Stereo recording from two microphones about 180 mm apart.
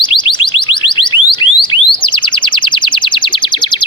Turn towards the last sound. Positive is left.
turn(degrees=25)  # may be behind; listen again after turning